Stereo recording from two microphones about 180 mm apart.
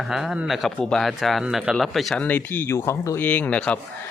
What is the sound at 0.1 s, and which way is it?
Speech, centre (ahead or behind).